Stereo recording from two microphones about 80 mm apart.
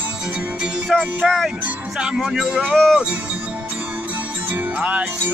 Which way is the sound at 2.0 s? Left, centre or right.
Centre.